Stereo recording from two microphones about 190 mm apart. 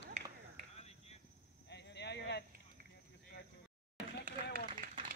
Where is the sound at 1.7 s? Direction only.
60° left (ahead or behind).